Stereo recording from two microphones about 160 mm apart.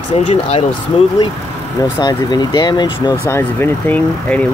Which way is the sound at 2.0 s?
25° left (ahead or behind).